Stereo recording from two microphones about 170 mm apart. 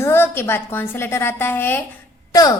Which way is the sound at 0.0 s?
15° left (ahead or behind).